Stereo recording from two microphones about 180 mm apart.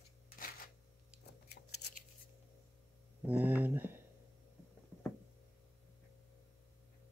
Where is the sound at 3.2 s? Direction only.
10° right (ahead or behind).